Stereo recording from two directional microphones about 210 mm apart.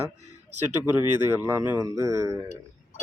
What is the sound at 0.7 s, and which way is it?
Speech, 90° right.